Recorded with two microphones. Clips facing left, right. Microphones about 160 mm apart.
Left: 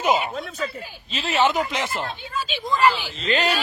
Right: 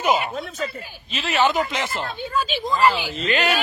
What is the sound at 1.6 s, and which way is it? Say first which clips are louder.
Speech: right 1 dB; 15° left (ahead or behind).